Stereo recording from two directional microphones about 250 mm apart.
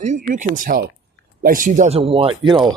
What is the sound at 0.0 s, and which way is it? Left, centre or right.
Speech, right.